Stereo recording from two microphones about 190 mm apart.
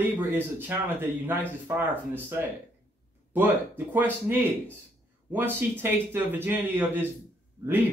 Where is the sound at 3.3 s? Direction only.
10° right (ahead or behind).